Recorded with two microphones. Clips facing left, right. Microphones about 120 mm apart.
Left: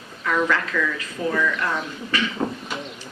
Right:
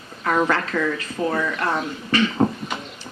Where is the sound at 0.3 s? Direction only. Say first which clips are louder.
Right 2 dB; 40° right (ahead or behind).